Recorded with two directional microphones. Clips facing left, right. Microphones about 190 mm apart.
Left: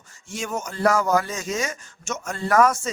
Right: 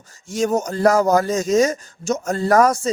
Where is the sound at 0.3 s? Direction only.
40° right (ahead or behind).